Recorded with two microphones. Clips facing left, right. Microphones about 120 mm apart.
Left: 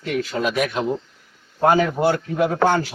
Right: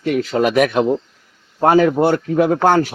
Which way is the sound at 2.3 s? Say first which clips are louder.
Right 5 dB; 60° right (ahead or behind).